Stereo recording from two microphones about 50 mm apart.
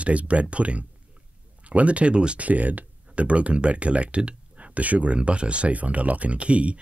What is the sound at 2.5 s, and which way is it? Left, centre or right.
Speech, right.